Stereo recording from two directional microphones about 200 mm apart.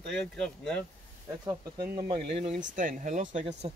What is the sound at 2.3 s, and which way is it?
Speech, 35° right (ahead or behind).